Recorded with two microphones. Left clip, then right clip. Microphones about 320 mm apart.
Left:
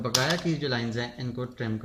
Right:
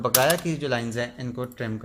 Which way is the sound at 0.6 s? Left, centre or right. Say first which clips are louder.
Right 3 dB; centre.